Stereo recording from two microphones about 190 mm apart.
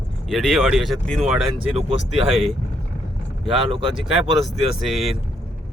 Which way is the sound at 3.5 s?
30° right (ahead or behind).